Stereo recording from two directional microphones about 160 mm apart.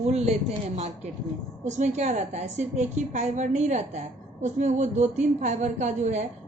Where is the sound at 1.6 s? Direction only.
45° right (ahead or behind).